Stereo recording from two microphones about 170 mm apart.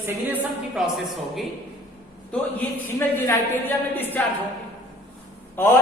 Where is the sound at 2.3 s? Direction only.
10° left (ahead or behind).